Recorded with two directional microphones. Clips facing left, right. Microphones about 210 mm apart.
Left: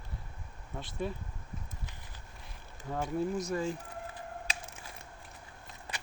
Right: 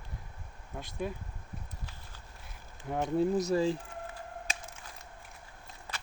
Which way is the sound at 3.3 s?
35° right (ahead or behind).